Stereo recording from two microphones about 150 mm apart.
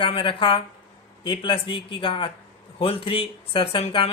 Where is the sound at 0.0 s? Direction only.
35° left (ahead or behind).